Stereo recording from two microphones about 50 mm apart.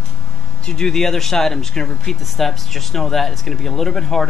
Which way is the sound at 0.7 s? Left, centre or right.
Centre.